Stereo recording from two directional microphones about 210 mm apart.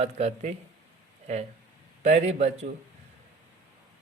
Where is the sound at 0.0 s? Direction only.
30° right (ahead or behind).